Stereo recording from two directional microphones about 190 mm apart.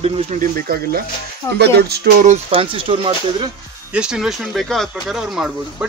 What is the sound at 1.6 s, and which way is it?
Speech, 60° right (ahead or behind).